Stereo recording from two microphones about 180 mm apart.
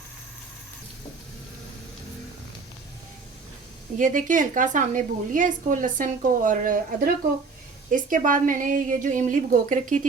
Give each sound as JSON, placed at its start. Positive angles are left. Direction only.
{"t": 3.9, "sound": "a woman's voice", "side_deg": -45}